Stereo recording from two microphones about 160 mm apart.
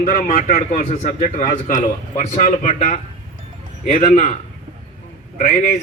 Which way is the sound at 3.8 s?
50° left (ahead or behind).